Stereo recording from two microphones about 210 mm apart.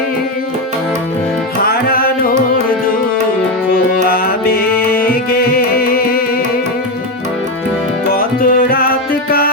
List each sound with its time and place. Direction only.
1.6 s music: 45° left (ahead or behind)
4.1 s music: 45° left (ahead or behind)
8.1 s tabla: 45° left (ahead or behind)